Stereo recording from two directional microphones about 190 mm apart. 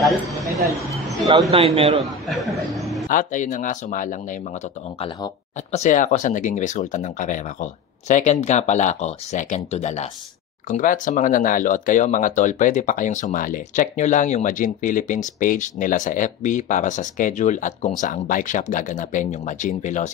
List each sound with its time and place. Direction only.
0.0 s a sound: centre (ahead or behind)
1.5 s a man's voice: 30° right (ahead or behind)
2.0 s speech: centre (ahead or behind)
3.1 s speech: 45° left (ahead or behind)
5.0 s speech: 30° left (ahead or behind)